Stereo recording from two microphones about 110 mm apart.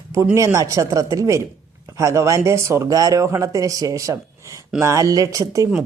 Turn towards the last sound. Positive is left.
turn(degrees=-30)  # may be behind; listen again after turning